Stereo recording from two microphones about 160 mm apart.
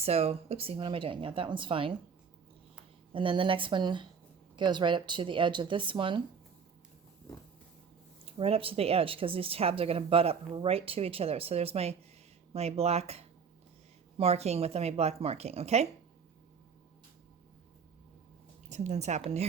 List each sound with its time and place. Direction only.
0.0 s speech: 40° right (ahead or behind)
3.1 s speech: 35° right (ahead or behind)
8.2 s speech: 35° right (ahead or behind)
18.7 s a woman's voice: 45° right (ahead or behind)